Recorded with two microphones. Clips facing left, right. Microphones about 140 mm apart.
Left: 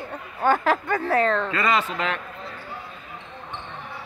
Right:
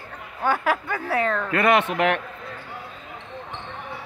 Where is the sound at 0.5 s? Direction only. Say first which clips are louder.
Left 2 dB; 10° right (ahead or behind).